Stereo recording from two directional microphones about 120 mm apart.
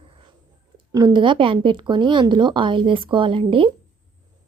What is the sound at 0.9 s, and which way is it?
Speech, 40° right (ahead or behind).